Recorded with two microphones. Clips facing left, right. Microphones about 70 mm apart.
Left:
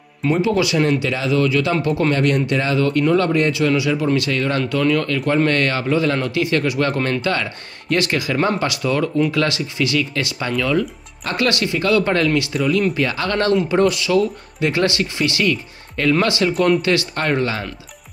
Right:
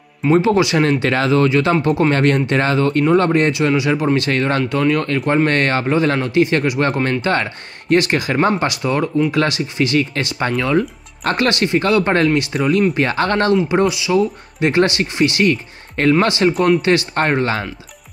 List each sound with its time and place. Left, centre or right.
0.2 s speech: centre
0.7 s speech: right
1.3 s speech: right
2.0 s speech: right
4.6 s speech: right
5.0 s speech: right
13.7 s speech: centre
14.6 s speech: right